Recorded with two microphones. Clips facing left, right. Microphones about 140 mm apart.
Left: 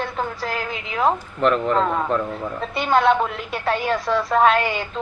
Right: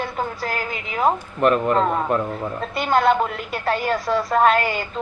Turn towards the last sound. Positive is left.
turn(degrees=0)  # may be behind; listen again after turning